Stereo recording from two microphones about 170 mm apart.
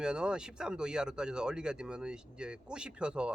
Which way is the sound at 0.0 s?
5° right (ahead or behind).